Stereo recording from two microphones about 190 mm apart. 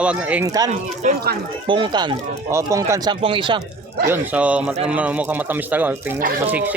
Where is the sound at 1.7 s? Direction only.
25° right (ahead or behind).